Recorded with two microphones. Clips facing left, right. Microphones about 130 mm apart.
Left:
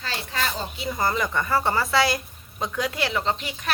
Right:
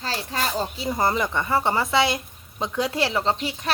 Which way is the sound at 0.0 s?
35° right (ahead or behind).